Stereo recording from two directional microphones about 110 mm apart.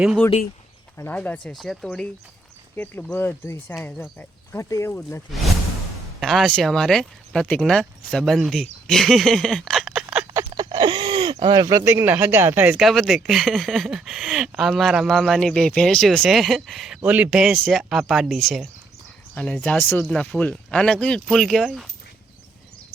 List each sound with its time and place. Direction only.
0.9 s speech: 20° left (ahead or behind)
1.5 s speech: centre (ahead or behind)
2.7 s speech: 15° left (ahead or behind)
6.1 s speech: centre (ahead or behind)
10.3 s a sound: 35° right (ahead or behind)
11.8 s speech: 20° right (ahead or behind)
12.7 s speech: centre (ahead or behind)
19.3 s speech: 15° left (ahead or behind); by 21.8 s 5° right (ahead or behind)